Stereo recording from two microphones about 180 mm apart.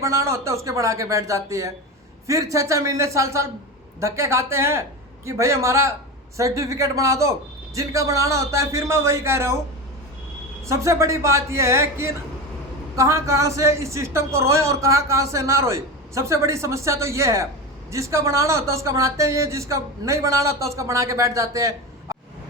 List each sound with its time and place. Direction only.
0.0 s speech: 15° right (ahead or behind)
10.7 s speech: 15° right (ahead or behind)